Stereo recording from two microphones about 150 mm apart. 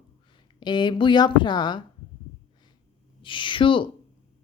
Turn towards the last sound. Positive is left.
turn(degrees=35)  # may be behind; listen again after turning